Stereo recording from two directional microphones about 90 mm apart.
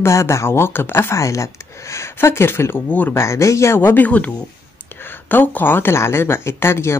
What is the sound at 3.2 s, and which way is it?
Speech, 35° left (ahead or behind).